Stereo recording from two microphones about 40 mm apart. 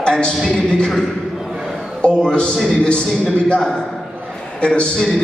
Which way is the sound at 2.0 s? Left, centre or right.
Left.